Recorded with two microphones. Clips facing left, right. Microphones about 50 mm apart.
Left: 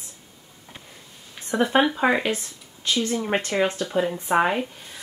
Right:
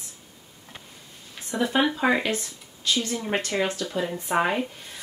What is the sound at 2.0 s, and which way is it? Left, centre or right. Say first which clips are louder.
Speech: left 2 dB; centre.